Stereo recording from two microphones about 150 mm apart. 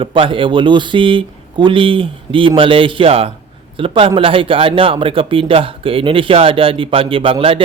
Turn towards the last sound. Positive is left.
turn(degrees=-35)  # may be behind; listen again after turning